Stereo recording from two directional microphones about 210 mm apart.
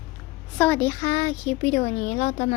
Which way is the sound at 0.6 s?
10° left (ahead or behind).